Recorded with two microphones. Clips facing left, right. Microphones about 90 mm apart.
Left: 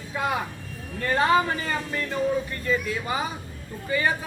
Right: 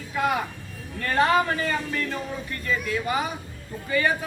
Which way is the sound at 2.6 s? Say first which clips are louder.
Even; 20° left (ahead or behind).